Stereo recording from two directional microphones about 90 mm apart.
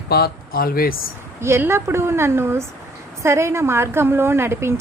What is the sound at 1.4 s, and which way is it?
A woman's voice, 30° right (ahead or behind).